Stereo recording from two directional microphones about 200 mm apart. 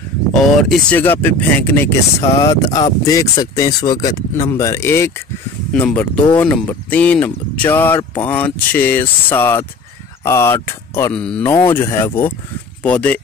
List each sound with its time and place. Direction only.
0.3 s speech: 5° left (ahead or behind)